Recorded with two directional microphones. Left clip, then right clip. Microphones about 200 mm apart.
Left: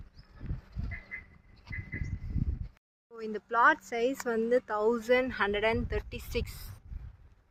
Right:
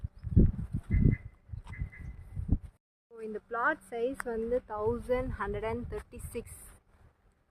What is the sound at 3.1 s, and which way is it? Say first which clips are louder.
Speech: left 7 dB; 45° left (ahead or behind).